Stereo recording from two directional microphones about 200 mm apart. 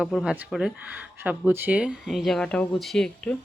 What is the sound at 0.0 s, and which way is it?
Speech, centre (ahead or behind).